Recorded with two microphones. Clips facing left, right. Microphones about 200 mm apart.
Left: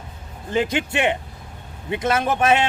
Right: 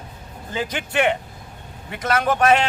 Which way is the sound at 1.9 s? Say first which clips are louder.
Even; 25° left (ahead or behind).